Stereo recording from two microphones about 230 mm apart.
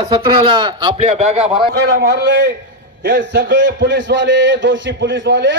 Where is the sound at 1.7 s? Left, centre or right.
Right.